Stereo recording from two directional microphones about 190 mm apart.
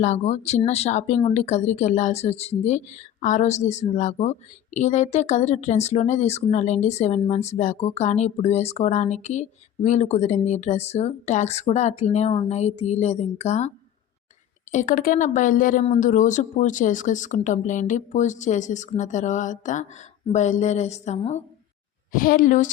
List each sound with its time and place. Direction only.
0.0 s speech: 35° left (ahead or behind)
22.1 s a woman's voice: 45° left (ahead or behind)